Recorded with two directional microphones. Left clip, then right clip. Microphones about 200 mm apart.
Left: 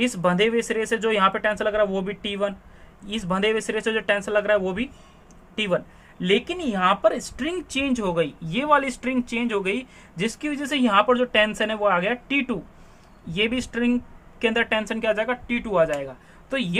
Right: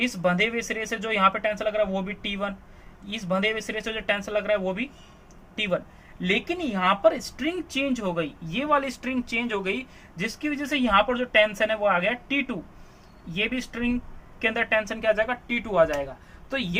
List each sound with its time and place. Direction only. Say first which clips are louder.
0.0 s speech: left 3 dB; 45° left (ahead or behind)
6.2 s speech: left 3 dB; 35° left (ahead or behind)